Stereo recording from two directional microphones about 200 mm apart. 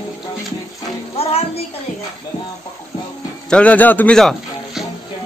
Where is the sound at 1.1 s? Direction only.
30° left (ahead or behind).